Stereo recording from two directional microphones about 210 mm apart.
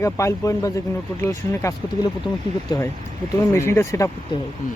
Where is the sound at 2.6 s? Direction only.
15° left (ahead or behind).